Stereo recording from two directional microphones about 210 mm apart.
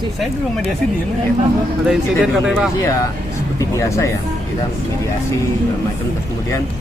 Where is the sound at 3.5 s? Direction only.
15° left (ahead or behind).